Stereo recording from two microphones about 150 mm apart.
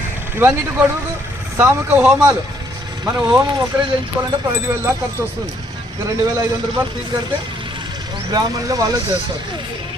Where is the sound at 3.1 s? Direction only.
20° right (ahead or behind).